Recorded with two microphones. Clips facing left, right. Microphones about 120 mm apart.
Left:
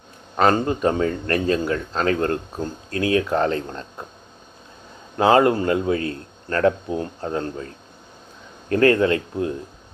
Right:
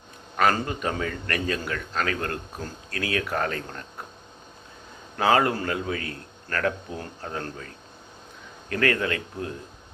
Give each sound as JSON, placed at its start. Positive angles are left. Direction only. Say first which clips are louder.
{"t": 0.3, "sound": "speech", "louder": "left 5 dB", "side_deg": 30}
{"t": 5.1, "sound": "speech", "louder": "left 6 dB", "side_deg": 25}
{"t": 8.7, "sound": "speech", "louder": "left 8 dB", "side_deg": 30}